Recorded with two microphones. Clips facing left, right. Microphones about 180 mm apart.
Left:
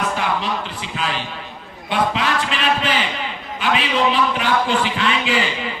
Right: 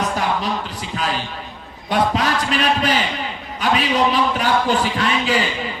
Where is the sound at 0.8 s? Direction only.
40° right (ahead or behind).